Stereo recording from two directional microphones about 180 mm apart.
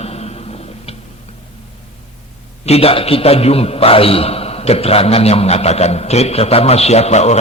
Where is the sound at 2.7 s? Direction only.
35° left (ahead or behind).